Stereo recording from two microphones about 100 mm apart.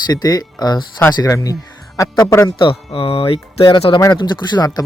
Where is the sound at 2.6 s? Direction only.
65° left (ahead or behind).